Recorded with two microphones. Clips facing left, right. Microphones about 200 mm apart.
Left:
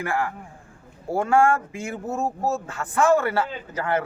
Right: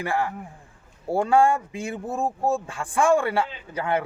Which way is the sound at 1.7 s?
30° right (ahead or behind).